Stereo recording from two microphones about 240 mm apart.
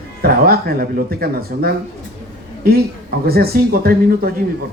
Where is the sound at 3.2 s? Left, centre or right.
Right.